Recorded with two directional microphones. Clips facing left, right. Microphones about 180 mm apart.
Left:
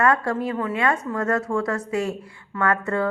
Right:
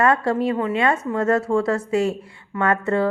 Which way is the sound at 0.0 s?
25° right (ahead or behind).